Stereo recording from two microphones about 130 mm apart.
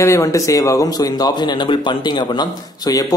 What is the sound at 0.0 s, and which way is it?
A man's voice, 25° left (ahead or behind).